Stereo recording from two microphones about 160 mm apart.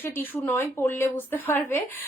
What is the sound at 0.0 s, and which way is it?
A woman's voice, 15° left (ahead or behind).